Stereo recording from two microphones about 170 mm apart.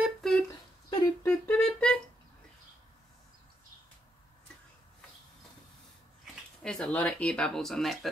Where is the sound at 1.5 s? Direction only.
5° left (ahead or behind).